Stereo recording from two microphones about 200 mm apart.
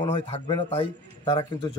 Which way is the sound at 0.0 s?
25° left (ahead or behind).